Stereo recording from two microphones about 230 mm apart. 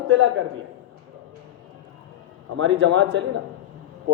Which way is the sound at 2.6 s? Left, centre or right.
Right.